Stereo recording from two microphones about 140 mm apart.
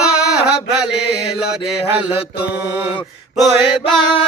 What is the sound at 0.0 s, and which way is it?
Chant, 5° right (ahead or behind).